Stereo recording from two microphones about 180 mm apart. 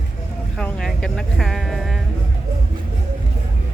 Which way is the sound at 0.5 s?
5° left (ahead or behind).